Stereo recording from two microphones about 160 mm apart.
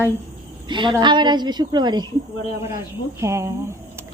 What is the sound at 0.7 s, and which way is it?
A woman's voice, 30° right (ahead or behind).